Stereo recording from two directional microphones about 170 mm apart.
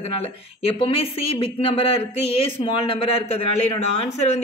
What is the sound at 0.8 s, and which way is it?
A man's voice, 30° left (ahead or behind).